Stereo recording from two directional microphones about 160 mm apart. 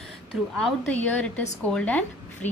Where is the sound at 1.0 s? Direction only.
10° left (ahead or behind).